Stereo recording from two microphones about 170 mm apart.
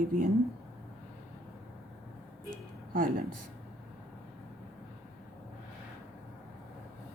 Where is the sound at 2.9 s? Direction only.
55° right (ahead or behind).